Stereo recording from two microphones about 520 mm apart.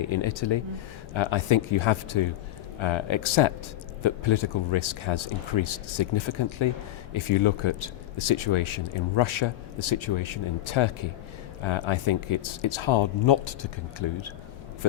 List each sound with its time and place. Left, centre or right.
0.0 s speech: left